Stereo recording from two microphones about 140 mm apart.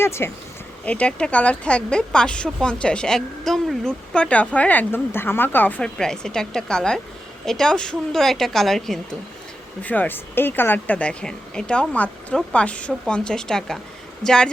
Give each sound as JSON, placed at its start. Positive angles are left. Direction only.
{"t": 0.0, "sound": "a woman's voice", "side_deg": 20}